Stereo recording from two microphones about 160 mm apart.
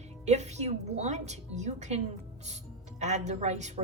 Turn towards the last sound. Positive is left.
turn(degrees=-45)  # may be behind; listen again after turning